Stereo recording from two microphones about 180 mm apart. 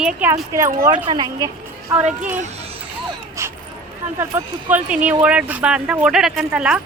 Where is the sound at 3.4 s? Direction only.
15° right (ahead or behind).